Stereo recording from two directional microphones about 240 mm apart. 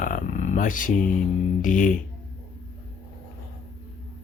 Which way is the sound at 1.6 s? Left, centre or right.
Left.